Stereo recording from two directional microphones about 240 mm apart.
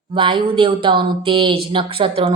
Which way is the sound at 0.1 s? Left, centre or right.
Right.